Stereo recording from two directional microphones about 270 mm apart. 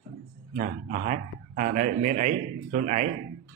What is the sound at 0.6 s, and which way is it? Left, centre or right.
A man's voice, right.